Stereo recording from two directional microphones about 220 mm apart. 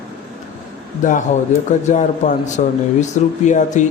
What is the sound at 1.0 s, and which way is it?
Speech, 35° left (ahead or behind).